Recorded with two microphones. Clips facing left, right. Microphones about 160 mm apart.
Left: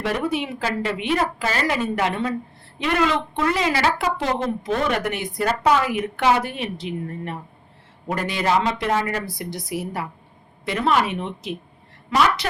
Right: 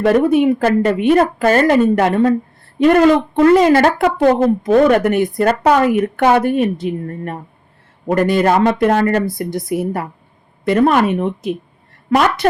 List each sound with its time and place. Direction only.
0.0 s speech: 50° right (ahead or behind)